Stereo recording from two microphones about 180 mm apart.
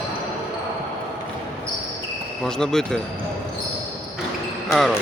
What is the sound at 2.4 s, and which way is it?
Speech, 5° left (ahead or behind).